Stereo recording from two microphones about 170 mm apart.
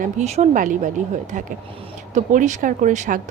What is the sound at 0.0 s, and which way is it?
Speech, 40° right (ahead or behind).